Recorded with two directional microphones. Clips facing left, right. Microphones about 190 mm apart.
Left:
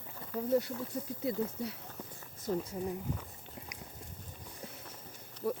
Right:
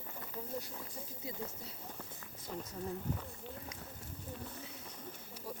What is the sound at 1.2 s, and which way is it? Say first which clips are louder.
Speech: left 11 dB; 70° left (ahead or behind).